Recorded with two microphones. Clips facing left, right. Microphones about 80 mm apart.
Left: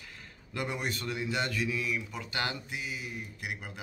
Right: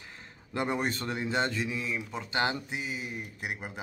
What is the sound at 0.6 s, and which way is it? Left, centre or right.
Speech, right.